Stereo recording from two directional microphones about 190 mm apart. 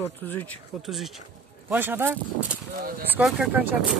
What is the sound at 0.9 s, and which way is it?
Speech, centre (ahead or behind).